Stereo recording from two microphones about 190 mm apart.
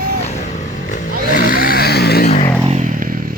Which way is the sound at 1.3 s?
50° left (ahead or behind).